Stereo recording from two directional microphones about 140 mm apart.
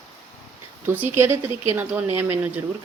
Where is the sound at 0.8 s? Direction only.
15° right (ahead or behind).